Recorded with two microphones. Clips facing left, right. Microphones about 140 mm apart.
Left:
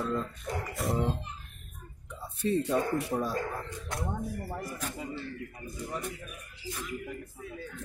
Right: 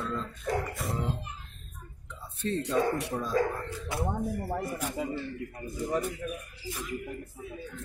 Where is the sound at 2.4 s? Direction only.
10° left (ahead or behind).